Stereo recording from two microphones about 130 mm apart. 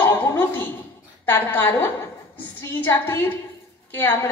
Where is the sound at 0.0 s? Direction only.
15° left (ahead or behind).